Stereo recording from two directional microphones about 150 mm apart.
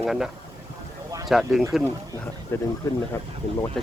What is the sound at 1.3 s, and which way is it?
Speech, centre (ahead or behind).